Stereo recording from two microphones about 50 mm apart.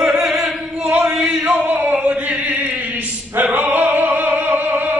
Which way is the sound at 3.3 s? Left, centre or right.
Right.